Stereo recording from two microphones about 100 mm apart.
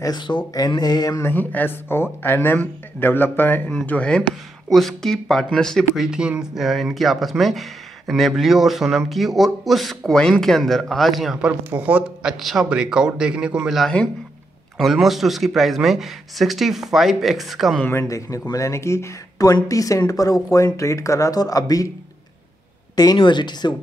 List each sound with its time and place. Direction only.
0.0 s a sound: 45° left (ahead or behind)
1.2 s speech: 20° left (ahead or behind)
6.0 s speech: 10° right (ahead or behind)
11.7 s speech: 15° right (ahead or behind)
18.0 s speech: 35° left (ahead or behind)
23.1 s a sound: 50° left (ahead or behind)